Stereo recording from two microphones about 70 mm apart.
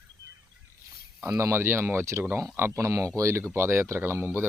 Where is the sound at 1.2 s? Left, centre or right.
Right.